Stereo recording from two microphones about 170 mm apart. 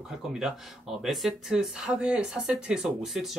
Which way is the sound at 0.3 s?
5° right (ahead or behind).